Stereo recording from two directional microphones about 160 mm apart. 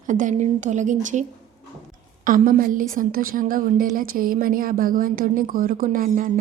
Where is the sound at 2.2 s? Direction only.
60° right (ahead or behind).